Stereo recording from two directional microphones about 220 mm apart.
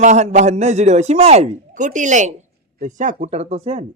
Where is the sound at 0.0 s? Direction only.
30° right (ahead or behind).